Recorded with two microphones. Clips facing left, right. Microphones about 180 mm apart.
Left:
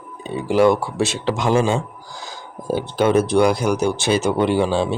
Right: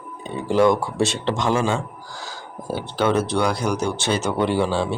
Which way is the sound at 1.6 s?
20° left (ahead or behind).